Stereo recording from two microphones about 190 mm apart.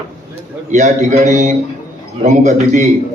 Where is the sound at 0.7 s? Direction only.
40° right (ahead or behind).